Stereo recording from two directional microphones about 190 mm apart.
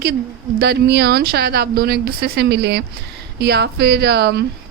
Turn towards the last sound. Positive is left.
turn(degrees=-60)  # may be behind; listen again after turning